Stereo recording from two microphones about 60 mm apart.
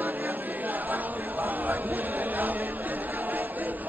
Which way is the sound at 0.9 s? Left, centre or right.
Right.